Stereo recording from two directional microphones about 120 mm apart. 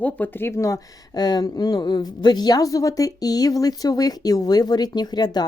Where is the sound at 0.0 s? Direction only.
15° left (ahead or behind).